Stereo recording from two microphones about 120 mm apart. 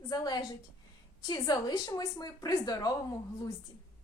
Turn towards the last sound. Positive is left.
turn(degrees=30)  # may be behind; listen again after turning